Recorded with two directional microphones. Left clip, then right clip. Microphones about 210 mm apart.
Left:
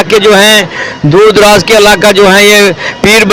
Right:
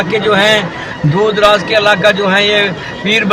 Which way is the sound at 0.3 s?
50° left (ahead or behind).